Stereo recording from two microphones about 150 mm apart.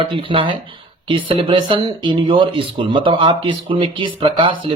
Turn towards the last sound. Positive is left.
turn(degrees=-35)  # may be behind; listen again after turning